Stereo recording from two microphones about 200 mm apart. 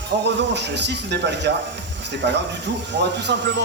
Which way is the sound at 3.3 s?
60° right (ahead or behind).